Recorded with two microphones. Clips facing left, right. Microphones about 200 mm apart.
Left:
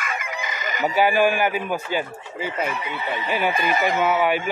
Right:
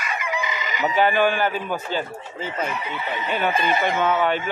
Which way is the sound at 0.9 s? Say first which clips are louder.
Left 1 dB; 10° left (ahead or behind).